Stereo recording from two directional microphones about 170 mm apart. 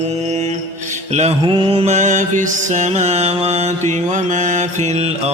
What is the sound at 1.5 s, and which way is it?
Mantra, 30° right (ahead or behind).